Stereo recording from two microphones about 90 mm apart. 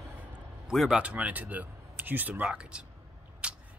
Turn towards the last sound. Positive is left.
turn(degrees=-10)  # may be behind; listen again after turning